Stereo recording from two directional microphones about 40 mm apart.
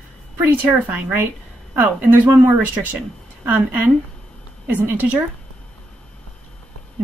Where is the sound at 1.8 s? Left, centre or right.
Right.